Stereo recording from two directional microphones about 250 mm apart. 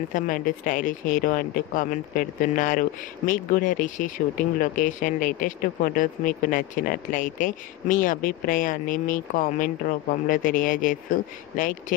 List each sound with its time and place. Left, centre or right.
0.1 s speech: left